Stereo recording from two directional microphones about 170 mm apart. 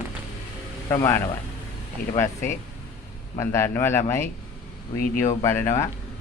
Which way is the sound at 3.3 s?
15° left (ahead or behind).